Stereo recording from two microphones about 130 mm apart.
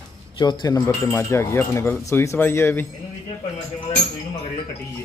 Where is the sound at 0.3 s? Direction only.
35° left (ahead or behind); by 2.8 s 20° left (ahead or behind).